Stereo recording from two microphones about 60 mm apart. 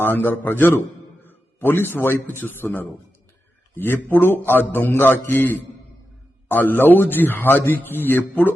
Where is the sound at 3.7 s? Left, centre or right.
Left.